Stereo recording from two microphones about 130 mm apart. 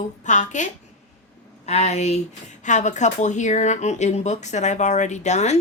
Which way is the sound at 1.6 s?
60° left (ahead or behind).